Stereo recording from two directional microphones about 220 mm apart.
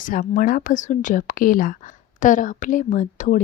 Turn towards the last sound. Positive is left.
turn(degrees=35)  # may be behind; listen again after turning